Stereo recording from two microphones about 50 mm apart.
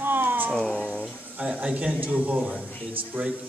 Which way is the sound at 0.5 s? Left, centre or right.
Centre.